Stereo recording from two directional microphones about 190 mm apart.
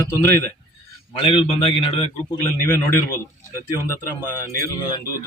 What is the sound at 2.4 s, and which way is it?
Speech, 10° left (ahead or behind).